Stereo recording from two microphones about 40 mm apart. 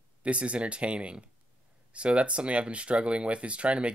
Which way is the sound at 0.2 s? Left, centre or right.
Right.